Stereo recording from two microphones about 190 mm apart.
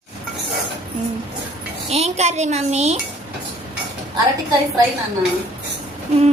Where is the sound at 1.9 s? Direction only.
35° right (ahead or behind).